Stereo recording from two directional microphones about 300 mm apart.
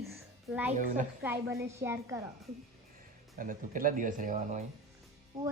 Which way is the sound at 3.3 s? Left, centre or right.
Right.